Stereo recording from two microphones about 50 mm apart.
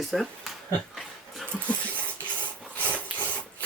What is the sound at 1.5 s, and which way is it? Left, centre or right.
Speech, left.